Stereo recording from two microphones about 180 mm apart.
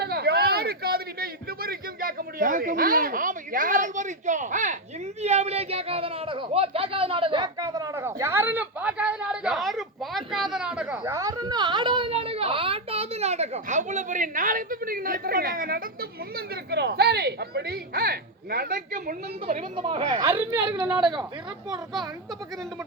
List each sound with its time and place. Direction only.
0.0 s a sound: 65° right (ahead or behind); by 4.8 s 45° right (ahead or behind)
5.2 s speech: 35° right (ahead or behind)
19.7 s speech: 30° right (ahead or behind)
20.5 s a woman's voice: 10° right (ahead or behind)